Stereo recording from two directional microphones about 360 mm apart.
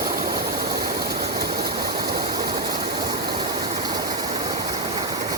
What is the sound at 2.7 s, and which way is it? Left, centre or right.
Stream, centre.